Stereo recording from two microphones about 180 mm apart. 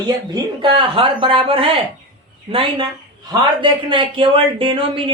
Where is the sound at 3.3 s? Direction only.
30° right (ahead or behind).